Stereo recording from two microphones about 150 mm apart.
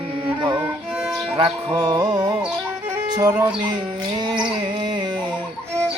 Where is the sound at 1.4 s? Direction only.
30° right (ahead or behind).